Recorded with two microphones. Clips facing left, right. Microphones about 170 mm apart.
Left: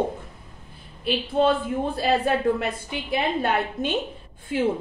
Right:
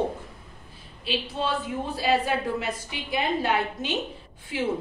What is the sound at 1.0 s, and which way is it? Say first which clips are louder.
A woman's voice: left 8 dB; 55° left (ahead or behind).